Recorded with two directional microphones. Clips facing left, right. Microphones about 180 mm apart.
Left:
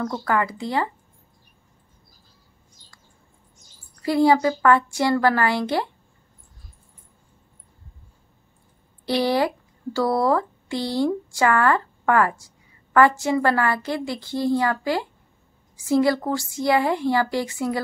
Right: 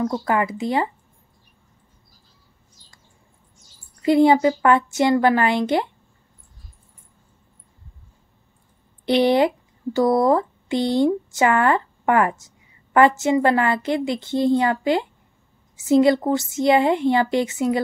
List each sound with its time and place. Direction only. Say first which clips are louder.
0.1 s speech: right 2 dB; 20° right (ahead or behind)
4.0 s speech: right 3 dB; 20° right (ahead or behind)
9.0 s speech: right 4 dB; 20° right (ahead or behind)